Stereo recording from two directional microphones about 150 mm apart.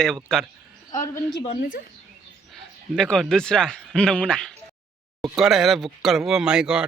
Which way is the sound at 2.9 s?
5° left (ahead or behind).